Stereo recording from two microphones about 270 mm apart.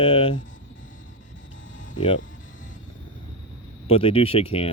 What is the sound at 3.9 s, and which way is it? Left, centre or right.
Speech, left.